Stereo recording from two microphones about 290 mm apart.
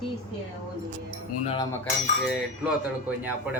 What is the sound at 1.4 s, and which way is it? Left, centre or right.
Cutlery, centre.